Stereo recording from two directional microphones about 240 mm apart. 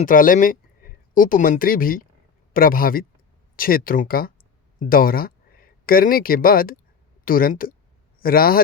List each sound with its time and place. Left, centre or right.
0.0 s speech: left